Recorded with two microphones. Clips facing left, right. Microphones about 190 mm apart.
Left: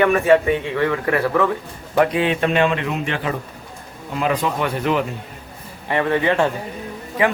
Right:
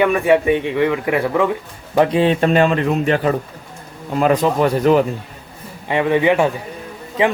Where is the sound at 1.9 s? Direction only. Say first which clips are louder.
Right 3 dB; 30° right (ahead or behind).